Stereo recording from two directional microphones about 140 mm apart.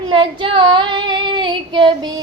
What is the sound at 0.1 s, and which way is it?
Child singing, 40° right (ahead or behind).